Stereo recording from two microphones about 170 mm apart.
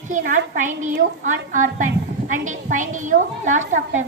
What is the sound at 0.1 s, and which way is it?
Speech, 50° right (ahead or behind).